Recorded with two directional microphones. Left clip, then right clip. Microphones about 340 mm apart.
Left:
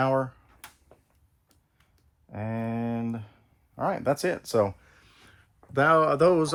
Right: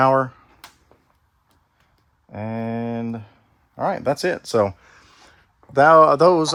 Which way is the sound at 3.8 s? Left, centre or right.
Right.